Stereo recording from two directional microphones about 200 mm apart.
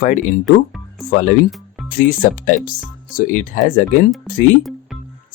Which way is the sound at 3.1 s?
40° left (ahead or behind).